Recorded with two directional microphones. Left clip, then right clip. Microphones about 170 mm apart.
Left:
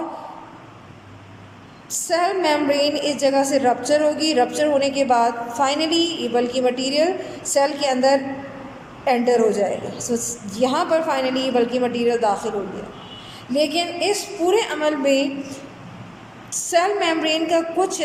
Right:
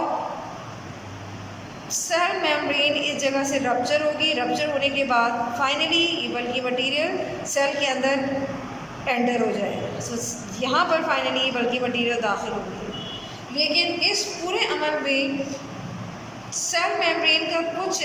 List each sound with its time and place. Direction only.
2.0 s a woman's voice: 35° left (ahead or behind)
13.6 s a woman's voice: 45° left (ahead or behind)
16.6 s a woman's voice: 40° left (ahead or behind)